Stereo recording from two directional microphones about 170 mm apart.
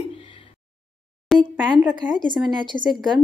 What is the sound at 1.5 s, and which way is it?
Speech, 10° right (ahead or behind).